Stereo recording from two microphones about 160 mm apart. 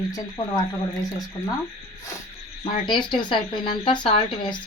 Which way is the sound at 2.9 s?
30° left (ahead or behind).